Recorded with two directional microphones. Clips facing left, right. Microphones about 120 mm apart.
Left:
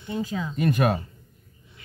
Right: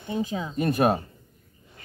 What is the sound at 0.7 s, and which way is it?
Speech, 35° right (ahead or behind).